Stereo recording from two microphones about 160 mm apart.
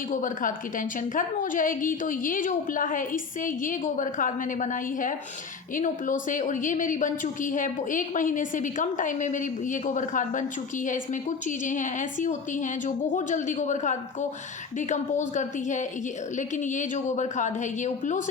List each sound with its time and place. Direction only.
0.1 s a woman's voice: 55° left (ahead or behind)